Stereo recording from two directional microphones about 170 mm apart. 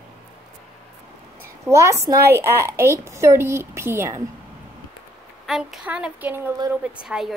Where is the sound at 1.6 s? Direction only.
15° right (ahead or behind).